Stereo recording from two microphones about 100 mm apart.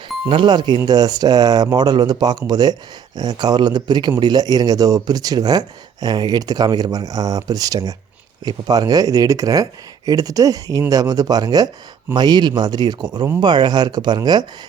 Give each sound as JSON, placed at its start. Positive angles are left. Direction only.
{"t": 0.3, "sound": "speech", "side_deg": -55}